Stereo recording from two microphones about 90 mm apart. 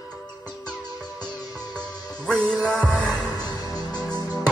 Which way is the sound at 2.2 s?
5° left (ahead or behind).